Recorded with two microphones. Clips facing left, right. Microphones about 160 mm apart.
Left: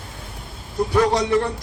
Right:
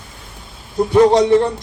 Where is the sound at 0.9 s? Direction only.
25° right (ahead or behind).